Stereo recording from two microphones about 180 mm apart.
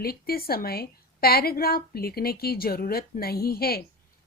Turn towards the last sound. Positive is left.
turn(degrees=55)  # may be behind; listen again after turning